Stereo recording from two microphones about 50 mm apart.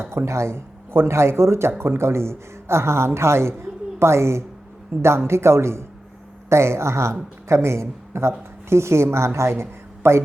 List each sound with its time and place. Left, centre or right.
0.0 s a woman's voice: right